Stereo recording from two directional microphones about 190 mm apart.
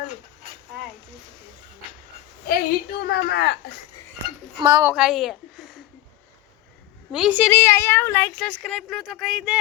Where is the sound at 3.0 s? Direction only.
55° left (ahead or behind).